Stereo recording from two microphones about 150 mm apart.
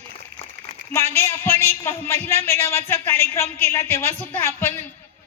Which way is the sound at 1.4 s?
45° right (ahead or behind).